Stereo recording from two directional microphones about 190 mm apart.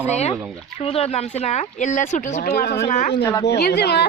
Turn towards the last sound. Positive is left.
turn(degrees=60)  # may be behind; listen again after turning